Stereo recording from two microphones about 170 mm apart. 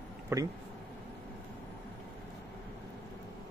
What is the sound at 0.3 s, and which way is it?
Speech, 15° right (ahead or behind).